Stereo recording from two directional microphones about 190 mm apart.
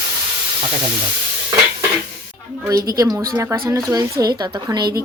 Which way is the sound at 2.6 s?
15° right (ahead or behind).